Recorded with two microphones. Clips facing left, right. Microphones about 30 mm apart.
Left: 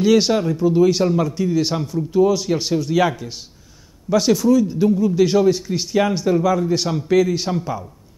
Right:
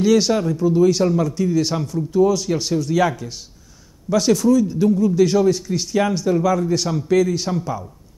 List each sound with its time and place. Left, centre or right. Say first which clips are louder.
0.0 s a man's voice: left 1 dB; centre